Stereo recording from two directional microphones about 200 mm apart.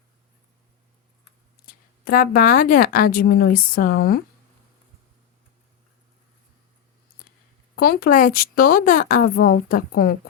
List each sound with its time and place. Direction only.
1.6 s speech: 45° left (ahead or behind)
7.8 s speech: 45° left (ahead or behind)